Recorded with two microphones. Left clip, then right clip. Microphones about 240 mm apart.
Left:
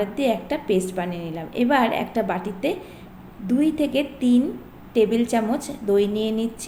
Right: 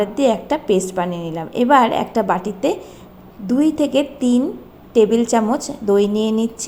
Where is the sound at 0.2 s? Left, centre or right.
Right.